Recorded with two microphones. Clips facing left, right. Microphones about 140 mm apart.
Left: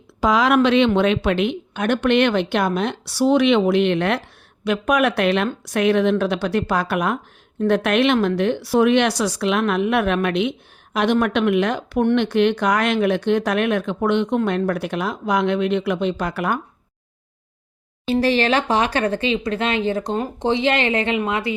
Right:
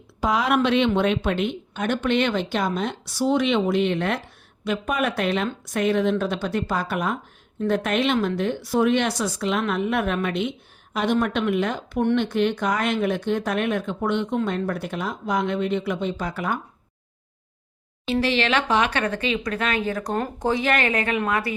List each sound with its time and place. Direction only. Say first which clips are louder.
0.2 s speech: left 5 dB; 90° left; by 16.6 s 70° left (ahead or behind)
18.0 s a woman's voice: left 4 dB; 40° left (ahead or behind); by 21.5 s 20° left (ahead or behind)